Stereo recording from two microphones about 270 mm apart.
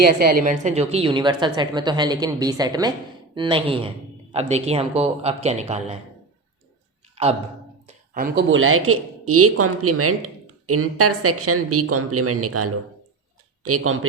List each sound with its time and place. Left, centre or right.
0.0 s a woman's voice: right
7.2 s a sound: right
8.4 s a woman's voice: right